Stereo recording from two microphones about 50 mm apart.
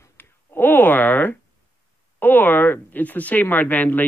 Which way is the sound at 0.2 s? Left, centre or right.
Left.